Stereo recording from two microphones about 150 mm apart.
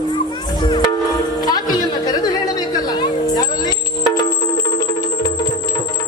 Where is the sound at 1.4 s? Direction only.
25° left (ahead or behind).